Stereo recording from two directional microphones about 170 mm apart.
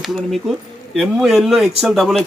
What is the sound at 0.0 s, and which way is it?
A man's voice, centre (ahead or behind).